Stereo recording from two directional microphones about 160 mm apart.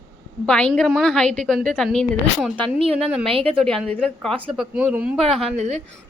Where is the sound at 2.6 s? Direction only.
35° right (ahead or behind).